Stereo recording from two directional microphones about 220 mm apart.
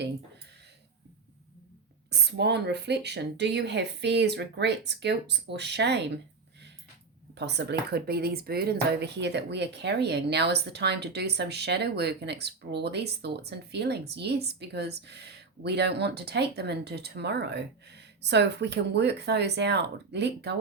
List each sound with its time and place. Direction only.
2.0 s speech: 50° right (ahead or behind)
7.3 s speech: 50° right (ahead or behind)